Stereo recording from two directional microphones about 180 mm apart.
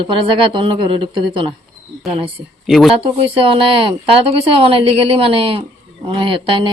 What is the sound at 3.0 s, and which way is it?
Speech, 30° right (ahead or behind).